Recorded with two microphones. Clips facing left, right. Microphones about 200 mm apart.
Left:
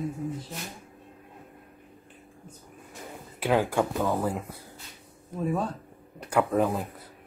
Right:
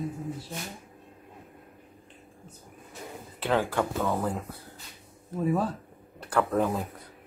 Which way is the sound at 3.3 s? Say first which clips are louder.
Left 2 dB; 10° left (ahead or behind).